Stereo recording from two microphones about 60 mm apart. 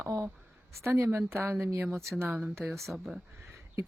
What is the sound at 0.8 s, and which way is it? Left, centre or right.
Speech, right.